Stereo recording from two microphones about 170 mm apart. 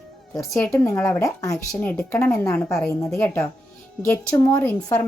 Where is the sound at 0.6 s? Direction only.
15° left (ahead or behind).